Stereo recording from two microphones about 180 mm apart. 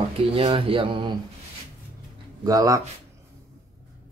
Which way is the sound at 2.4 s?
20° right (ahead or behind).